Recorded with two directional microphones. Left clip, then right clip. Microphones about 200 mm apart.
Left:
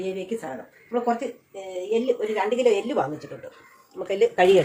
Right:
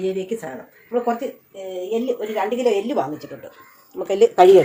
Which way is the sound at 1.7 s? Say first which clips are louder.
Even; centre (ahead or behind).